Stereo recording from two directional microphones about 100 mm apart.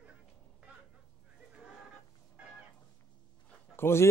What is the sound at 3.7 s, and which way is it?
Speech, 25° left (ahead or behind).